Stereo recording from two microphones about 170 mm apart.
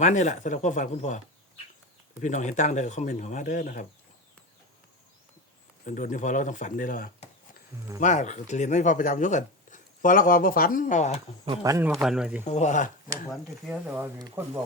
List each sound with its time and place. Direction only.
0.0 s speech: 45° left (ahead or behind)
2.2 s speech: 45° left (ahead or behind)
5.8 s speech: 50° left (ahead or behind)
11.6 s a man's voice: 20° right (ahead or behind)
12.0 s speech: 5° right (ahead or behind)
12.5 s speech: 45° left (ahead or behind)
13.3 s speech: 10° right (ahead or behind)